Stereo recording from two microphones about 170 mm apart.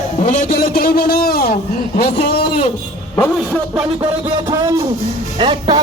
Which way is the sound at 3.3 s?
5° left (ahead or behind).